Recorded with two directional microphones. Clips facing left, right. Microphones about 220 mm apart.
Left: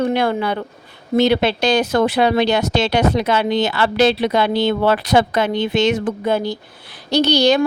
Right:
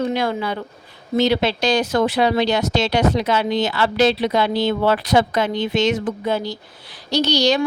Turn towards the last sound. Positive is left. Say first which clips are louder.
# left 3 dB
turn(degrees=55)  # may be behind; listen again after turning